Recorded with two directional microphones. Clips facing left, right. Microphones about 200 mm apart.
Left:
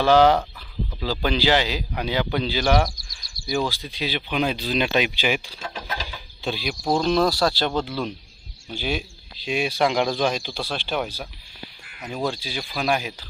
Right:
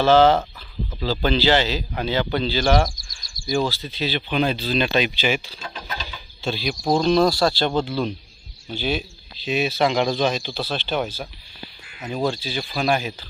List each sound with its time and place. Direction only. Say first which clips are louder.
0.0 s speech: right 1 dB; 10° left (ahead or behind)
2.9 s bird: right 1 dB; 65° left (ahead or behind)
3.7 s speech: right 2 dB; 15° left (ahead or behind)
6.0 s chicken: even; 15° left (ahead or behind)
6.9 s speech: right 3 dB; 5° left (ahead or behind)
7.9 s speech: right 3 dB; 10° left (ahead or behind)
12.0 s speech: right 3 dB; 5° left (ahead or behind)